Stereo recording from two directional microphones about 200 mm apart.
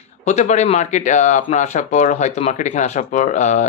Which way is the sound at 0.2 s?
35° left (ahead or behind).